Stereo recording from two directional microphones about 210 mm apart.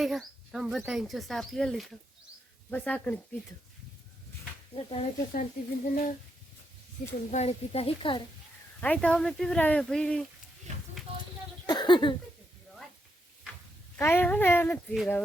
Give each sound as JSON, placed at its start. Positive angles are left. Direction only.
{"t": 0.0, "sound": "speech", "side_deg": 0}
{"t": 4.7, "sound": "a woman's voice", "side_deg": 25}
{"t": 5.3, "sound": "speech", "side_deg": 40}
{"t": 7.3, "sound": "a woman's voice", "side_deg": 30}
{"t": 8.8, "sound": "speech", "side_deg": 5}
{"t": 11.6, "sound": "a sound", "side_deg": 20}
{"t": 13.9, "sound": "speech", "side_deg": 10}